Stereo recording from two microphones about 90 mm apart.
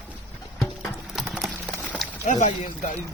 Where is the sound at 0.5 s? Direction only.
Centre (ahead or behind).